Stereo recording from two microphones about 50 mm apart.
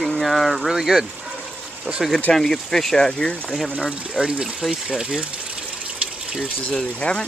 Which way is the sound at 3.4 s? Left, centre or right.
Centre.